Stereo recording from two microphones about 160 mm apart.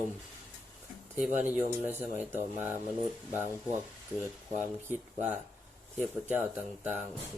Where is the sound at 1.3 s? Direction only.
10° right (ahead or behind).